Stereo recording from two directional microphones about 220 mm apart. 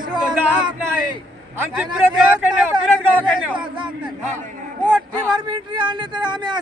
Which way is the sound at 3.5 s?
20° right (ahead or behind).